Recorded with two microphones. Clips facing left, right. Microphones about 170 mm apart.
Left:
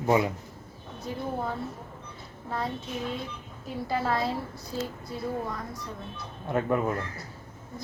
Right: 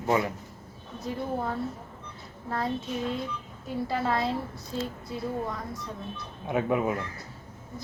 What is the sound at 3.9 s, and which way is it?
Speech, centre (ahead or behind).